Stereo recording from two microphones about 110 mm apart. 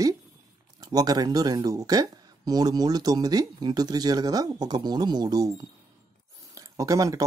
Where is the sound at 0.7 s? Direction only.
35° right (ahead or behind).